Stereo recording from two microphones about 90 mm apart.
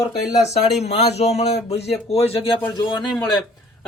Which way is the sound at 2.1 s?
90° left.